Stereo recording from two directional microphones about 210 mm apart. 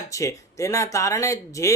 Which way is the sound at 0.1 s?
15° left (ahead or behind).